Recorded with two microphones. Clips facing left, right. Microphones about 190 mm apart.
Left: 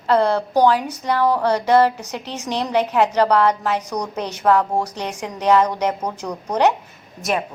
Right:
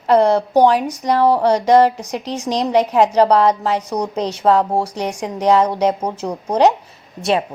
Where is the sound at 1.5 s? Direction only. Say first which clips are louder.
Right 2 dB; 15° right (ahead or behind).